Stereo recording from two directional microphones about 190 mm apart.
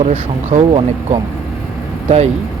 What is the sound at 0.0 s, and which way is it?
Speech, 35° right (ahead or behind).